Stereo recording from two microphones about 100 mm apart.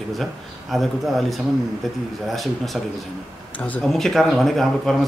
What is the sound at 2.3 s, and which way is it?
Speech, centre (ahead or behind).